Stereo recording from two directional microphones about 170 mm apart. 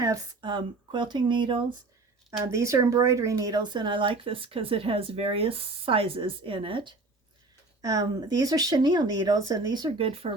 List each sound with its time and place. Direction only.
0.0 s speech: 25° right (ahead or behind)
2.4 s speech: 20° right (ahead or behind)
7.8 s speech: 20° right (ahead or behind)